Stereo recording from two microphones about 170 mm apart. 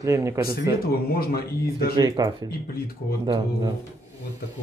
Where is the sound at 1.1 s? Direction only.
65° left (ahead or behind).